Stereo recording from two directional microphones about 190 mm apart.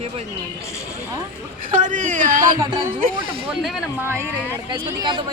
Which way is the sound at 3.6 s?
5° right (ahead or behind).